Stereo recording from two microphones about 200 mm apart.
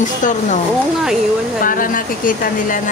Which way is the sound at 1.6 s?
45° left (ahead or behind).